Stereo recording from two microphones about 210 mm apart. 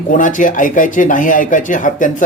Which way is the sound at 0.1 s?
40° left (ahead or behind).